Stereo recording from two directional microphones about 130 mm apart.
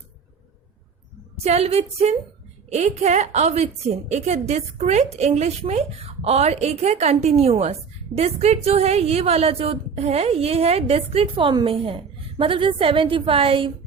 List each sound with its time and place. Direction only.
1.5 s a woman's voice: 55° right (ahead or behind)